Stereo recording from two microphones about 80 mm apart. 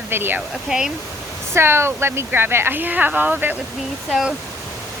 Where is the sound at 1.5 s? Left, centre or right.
Right.